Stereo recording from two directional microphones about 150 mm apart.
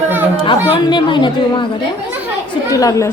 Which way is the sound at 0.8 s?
30° left (ahead or behind).